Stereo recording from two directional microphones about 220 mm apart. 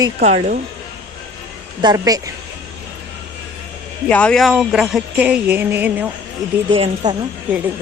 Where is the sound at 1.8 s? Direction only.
15° right (ahead or behind).